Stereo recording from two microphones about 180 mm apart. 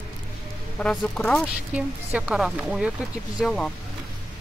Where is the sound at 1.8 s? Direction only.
5° right (ahead or behind).